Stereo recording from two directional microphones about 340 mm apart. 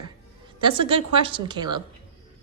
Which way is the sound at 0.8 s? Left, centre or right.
Centre.